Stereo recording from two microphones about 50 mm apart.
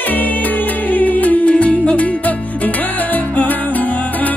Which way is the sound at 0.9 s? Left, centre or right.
Left.